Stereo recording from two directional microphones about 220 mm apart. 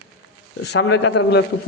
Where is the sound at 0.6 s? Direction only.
50° left (ahead or behind).